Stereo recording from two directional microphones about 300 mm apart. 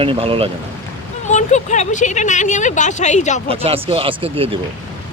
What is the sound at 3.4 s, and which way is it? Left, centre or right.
Speech, centre.